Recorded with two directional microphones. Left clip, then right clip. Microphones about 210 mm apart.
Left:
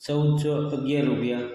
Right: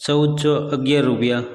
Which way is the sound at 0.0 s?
40° right (ahead or behind).